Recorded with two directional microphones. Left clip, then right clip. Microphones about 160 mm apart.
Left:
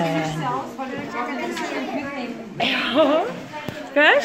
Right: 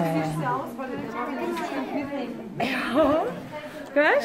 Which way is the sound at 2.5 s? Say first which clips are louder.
Left 5 dB; 5° right (ahead or behind).